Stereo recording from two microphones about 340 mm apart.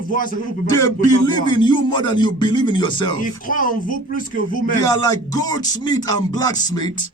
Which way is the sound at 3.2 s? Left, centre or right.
Left.